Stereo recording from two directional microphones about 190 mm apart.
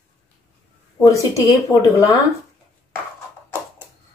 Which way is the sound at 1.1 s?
15° left (ahead or behind).